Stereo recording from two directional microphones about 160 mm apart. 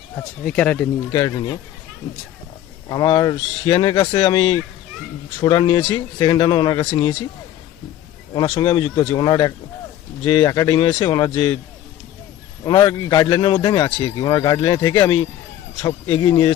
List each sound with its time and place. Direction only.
0.2 s speech: 10° left (ahead or behind)
2.9 s a man's voice: 25° left (ahead or behind)
8.4 s a man's voice: 30° left (ahead or behind)
12.6 s a man's voice: 25° left (ahead or behind)